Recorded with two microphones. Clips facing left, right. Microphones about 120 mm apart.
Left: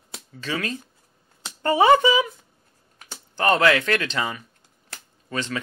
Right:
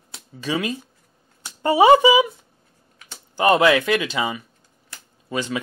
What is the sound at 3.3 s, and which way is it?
Speech, 10° right (ahead or behind).